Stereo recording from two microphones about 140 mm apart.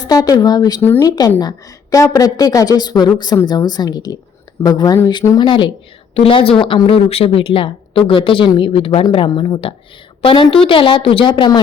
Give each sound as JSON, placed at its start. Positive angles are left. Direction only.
{"t": 0.1, "sound": "a woman's voice", "side_deg": 25}
{"t": 0.8, "sound": "a woman's voice", "side_deg": 15}